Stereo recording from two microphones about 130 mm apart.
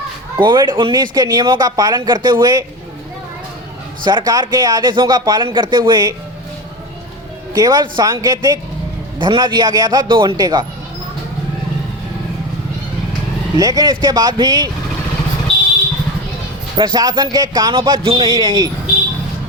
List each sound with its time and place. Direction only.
0.3 s speech: 35° right (ahead or behind)
4.0 s speech: 30° right (ahead or behind)
7.5 s speech: 30° right (ahead or behind)
9.1 s speech: 40° right (ahead or behind)
13.6 s speech: 30° right (ahead or behind)
16.7 s speech: 35° right (ahead or behind)